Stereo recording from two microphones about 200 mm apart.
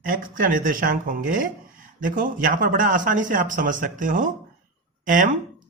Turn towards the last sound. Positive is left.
turn(degrees=-40)  # may be behind; listen again after turning